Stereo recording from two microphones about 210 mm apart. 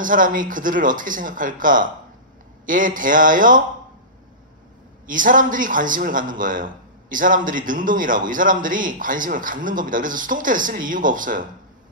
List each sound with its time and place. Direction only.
0.0 s a man's voice: 40° right (ahead or behind)
5.0 s a man's voice: 40° right (ahead or behind)